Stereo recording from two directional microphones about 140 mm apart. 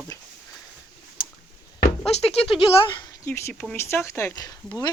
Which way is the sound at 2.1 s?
45° left (ahead or behind).